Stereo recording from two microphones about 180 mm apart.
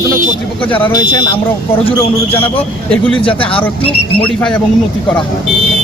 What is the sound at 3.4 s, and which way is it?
Speech, 5° left (ahead or behind).